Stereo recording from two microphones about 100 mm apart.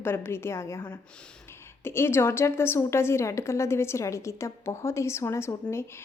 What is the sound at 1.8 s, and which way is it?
A woman's voice, 25° left (ahead or behind).